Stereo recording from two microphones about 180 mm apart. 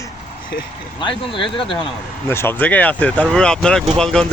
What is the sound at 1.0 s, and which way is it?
Speech, 25° left (ahead or behind).